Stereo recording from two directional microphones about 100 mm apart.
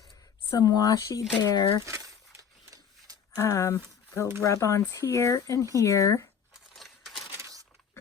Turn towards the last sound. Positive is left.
turn(degrees=0)  # may be behind; listen again after turning